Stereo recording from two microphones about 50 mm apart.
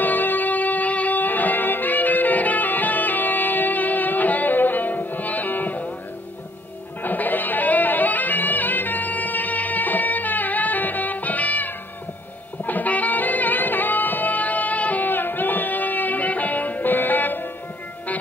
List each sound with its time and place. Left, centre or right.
0.0 s music: left
7.0 s music: left